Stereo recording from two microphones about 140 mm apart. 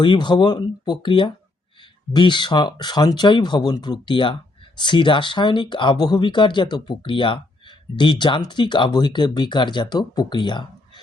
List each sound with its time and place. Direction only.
0.0 s speech: 35° left (ahead or behind)